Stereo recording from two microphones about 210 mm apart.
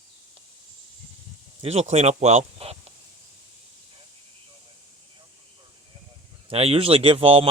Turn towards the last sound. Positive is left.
turn(degrees=-25)  # may be behind; listen again after turning